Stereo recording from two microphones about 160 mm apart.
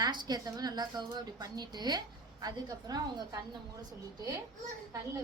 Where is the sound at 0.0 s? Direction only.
25° right (ahead or behind).